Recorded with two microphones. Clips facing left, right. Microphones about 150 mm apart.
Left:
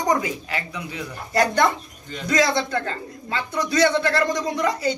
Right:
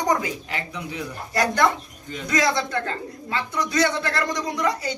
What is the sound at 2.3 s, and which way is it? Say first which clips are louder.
Speech: left 2 dB; 30° left (ahead or behind).